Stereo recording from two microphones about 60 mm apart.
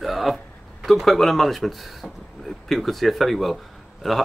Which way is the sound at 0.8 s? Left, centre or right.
Centre.